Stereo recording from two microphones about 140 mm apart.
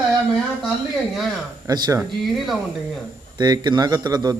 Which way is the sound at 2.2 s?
Centre (ahead or behind).